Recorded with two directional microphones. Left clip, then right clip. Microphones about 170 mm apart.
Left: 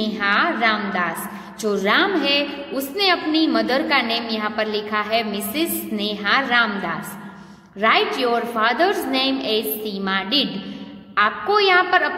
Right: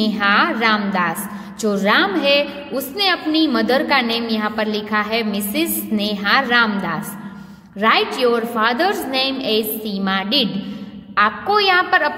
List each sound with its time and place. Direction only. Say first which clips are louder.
0.0 s a woman's voice: right 3 dB; 45° right (ahead or behind)